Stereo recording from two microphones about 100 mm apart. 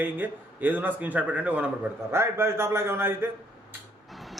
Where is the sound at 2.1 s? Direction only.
25° right (ahead or behind).